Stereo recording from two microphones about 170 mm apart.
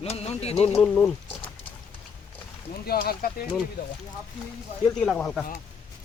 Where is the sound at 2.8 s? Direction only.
65° left (ahead or behind).